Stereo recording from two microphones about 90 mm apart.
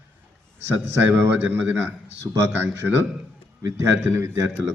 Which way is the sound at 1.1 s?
20° right (ahead or behind).